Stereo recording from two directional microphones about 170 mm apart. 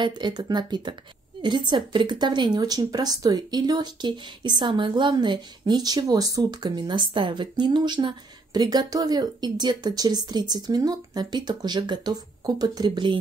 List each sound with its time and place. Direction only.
0.0 s a woman's voice: 25° right (ahead or behind)